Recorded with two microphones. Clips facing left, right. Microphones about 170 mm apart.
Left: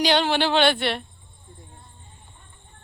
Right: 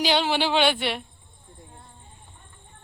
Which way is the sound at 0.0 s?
5° right (ahead or behind).